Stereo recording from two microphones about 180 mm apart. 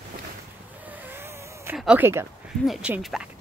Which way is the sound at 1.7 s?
5° right (ahead or behind).